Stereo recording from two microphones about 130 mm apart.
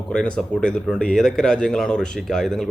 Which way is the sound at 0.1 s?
5° left (ahead or behind).